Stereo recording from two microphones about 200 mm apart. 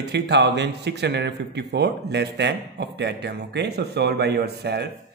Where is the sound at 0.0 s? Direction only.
60° right (ahead or behind).